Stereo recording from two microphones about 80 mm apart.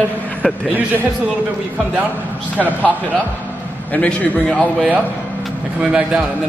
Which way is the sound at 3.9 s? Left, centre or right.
Centre.